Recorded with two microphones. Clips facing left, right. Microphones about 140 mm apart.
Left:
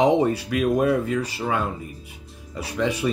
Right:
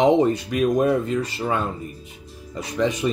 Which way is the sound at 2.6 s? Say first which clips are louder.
Right 2 dB; 10° left (ahead or behind).